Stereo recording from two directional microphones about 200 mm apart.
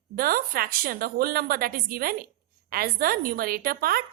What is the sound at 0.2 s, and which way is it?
A woman's voice, 45° right (ahead or behind).